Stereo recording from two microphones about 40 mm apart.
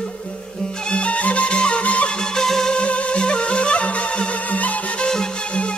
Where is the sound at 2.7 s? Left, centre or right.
Left.